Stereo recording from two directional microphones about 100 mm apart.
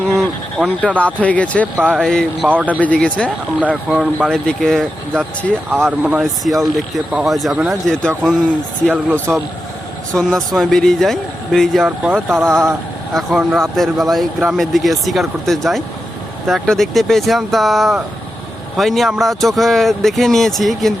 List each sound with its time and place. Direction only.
0.0 s a sound: centre (ahead or behind)
0.8 s speech: 15° left (ahead or behind)
1.7 s speech: 5° left (ahead or behind)
2.5 s speech: 15° right (ahead or behind)
2.8 s speech: 10° left (ahead or behind)
3.8 s speech: 5° right (ahead or behind)
6.0 s speech: 10° right (ahead or behind)
6.4 s speech: centre (ahead or behind)
10.2 s speech: 5° left (ahead or behind)